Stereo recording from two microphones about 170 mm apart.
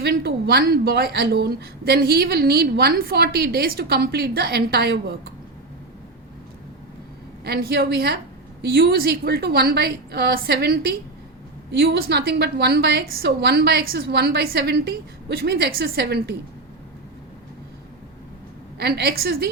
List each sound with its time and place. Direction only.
0.0 s a woman's voice: 65° right (ahead or behind)
7.4 s a woman's voice: 70° right (ahead or behind)
18.8 s a woman's voice: 70° right (ahead or behind)